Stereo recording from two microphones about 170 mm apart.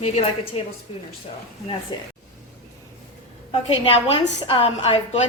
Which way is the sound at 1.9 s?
25° left (ahead or behind).